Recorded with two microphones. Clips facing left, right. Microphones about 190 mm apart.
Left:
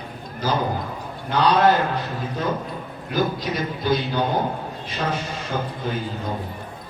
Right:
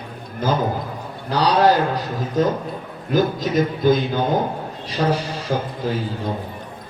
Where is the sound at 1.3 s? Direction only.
35° right (ahead or behind).